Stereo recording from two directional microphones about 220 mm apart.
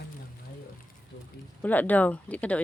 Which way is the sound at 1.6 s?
5° left (ahead or behind).